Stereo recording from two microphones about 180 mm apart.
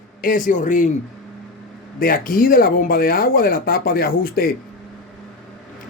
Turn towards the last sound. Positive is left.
turn(degrees=55)  # may be behind; listen again after turning